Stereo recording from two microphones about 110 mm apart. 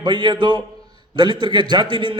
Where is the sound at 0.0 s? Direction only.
45° right (ahead or behind).